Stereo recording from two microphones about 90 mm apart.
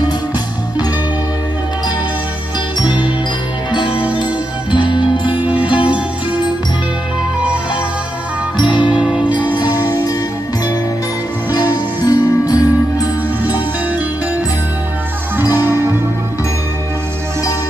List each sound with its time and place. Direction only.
2.8 s jingle: 60° left (ahead or behind)
3.7 s music: 75° left (ahead or behind)
4.2 s music: 60° left (ahead or behind)
5.8 s music: 15° right (ahead or behind)
8.5 s music: 60° left (ahead or behind)
9.0 s music: 10° right (ahead or behind)
9.6 s music: 50° left (ahead or behind)
12.0 s music: 45° left (ahead or behind)
15.5 s music: 25° right (ahead or behind)